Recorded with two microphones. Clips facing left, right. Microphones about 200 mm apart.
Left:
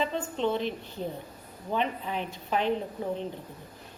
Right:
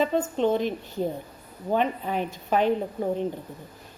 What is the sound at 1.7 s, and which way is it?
A woman's voice, 45° right (ahead or behind).